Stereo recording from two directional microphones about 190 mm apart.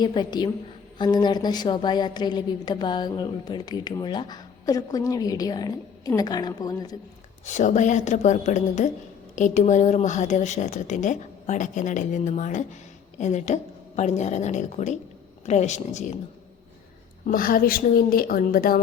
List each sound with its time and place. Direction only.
0.0 s a woman's voice: 25° left (ahead or behind)
7.4 s speech: 40° left (ahead or behind)
17.2 s speech: 50° left (ahead or behind)